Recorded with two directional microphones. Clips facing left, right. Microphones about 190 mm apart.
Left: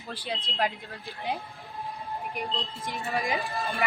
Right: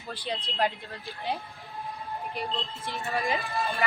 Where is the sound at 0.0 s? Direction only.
10° left (ahead or behind).